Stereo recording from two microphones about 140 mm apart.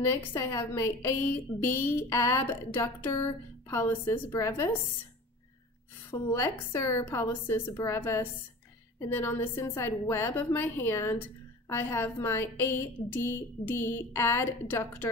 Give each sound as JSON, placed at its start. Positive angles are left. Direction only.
{"t": 0.0, "sound": "a woman's voice", "side_deg": 20}
{"t": 6.3, "sound": "a woman's voice", "side_deg": 15}